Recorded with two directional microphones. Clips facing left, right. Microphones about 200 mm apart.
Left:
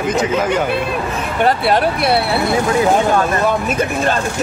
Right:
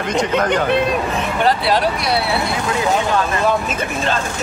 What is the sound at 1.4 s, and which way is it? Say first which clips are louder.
Speech: left 3 dB; 55° left (ahead or behind).